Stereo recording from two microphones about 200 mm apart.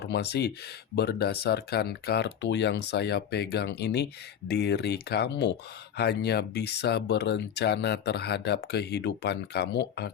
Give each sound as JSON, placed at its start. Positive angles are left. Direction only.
{"t": 0.0, "sound": "speech", "side_deg": 55}